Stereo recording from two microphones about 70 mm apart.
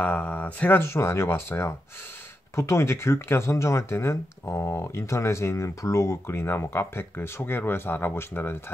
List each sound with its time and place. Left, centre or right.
0.0 s speech: left